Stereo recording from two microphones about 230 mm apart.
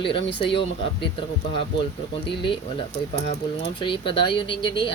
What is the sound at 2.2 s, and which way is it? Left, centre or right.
Speech, left.